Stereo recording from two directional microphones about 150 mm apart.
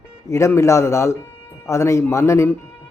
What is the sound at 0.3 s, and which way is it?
Speech, 20° left (ahead or behind).